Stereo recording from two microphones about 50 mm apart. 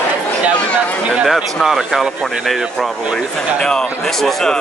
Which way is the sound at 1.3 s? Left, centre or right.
Centre.